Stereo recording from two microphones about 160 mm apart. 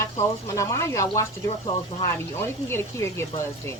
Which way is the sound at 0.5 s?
20° left (ahead or behind).